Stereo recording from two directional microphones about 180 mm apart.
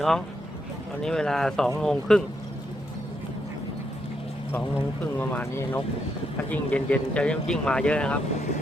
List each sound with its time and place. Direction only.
1.0 s speech: 5° left (ahead or behind)
5.1 s speech: 10° left (ahead or behind)